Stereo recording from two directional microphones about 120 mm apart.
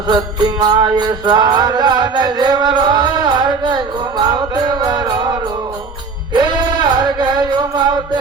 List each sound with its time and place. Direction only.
0.1 s music: 35° right (ahead or behind)